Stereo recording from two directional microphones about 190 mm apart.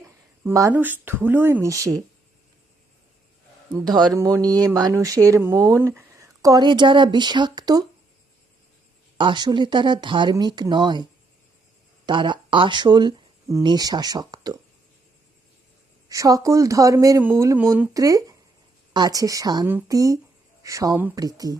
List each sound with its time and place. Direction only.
0.4 s speech: 15° right (ahead or behind)
3.8 s speech: 20° right (ahead or behind)
9.1 s speech: 25° right (ahead or behind)
12.0 s speech: 25° right (ahead or behind)
16.0 s speech: 20° right (ahead or behind)